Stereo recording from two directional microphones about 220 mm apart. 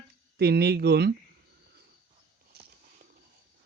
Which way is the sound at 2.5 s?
45° right (ahead or behind).